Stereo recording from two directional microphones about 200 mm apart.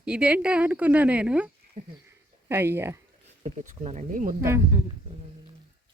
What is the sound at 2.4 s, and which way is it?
Speech, 10° right (ahead or behind).